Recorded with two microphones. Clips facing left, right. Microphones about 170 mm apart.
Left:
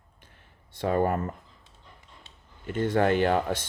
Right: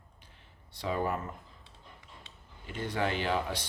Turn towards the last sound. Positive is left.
turn(degrees=50)  # may be behind; listen again after turning